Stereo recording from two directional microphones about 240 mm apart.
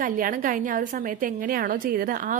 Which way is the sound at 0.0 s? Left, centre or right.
Right.